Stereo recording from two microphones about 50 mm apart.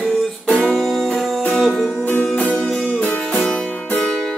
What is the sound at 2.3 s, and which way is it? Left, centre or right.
Music, centre.